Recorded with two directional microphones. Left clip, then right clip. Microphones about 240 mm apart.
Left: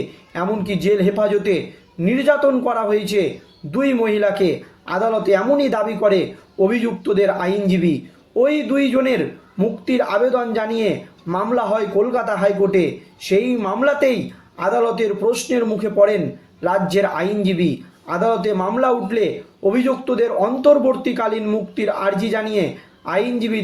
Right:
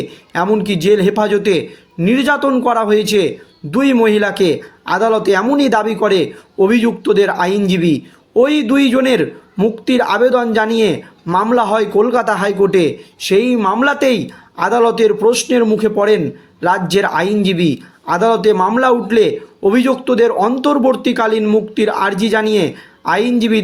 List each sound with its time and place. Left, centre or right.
0.3 s speech: right